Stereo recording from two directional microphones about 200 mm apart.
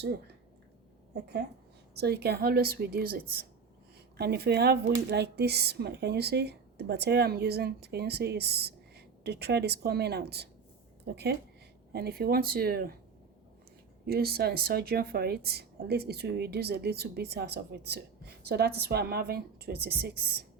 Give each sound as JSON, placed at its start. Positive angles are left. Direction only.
{"t": 1.1, "sound": "speech", "side_deg": -55}
{"t": 14.1, "sound": "speech", "side_deg": -50}